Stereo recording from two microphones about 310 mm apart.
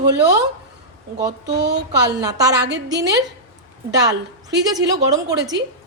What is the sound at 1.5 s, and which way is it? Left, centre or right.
Speech, right.